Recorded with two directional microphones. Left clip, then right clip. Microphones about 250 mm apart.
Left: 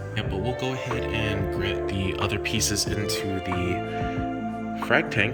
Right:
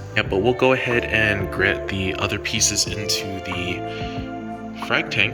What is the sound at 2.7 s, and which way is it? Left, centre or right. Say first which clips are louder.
Speech: right 4 dB; left.